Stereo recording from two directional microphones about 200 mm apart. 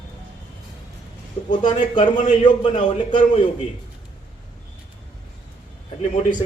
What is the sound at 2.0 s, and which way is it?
Speech, 35° left (ahead or behind).